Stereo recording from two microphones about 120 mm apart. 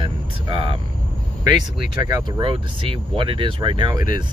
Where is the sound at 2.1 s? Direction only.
40° right (ahead or behind).